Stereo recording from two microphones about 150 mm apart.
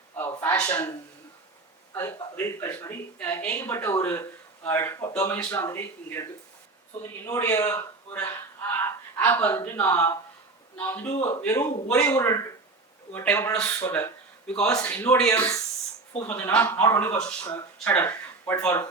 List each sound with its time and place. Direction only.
0.2 s a sound: 15° left (ahead or behind)
1.9 s speech: 20° left (ahead or behind)
15.3 s speech: 20° left (ahead or behind)
16.2 s speech: 10° left (ahead or behind)